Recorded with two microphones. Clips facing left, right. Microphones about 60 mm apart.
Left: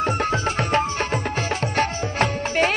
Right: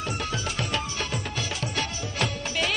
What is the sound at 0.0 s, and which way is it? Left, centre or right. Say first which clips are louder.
Music: left 9 dB; left.